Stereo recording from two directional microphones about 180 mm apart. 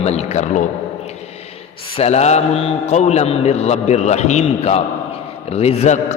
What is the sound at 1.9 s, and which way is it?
A man's voice, 35° left (ahead or behind).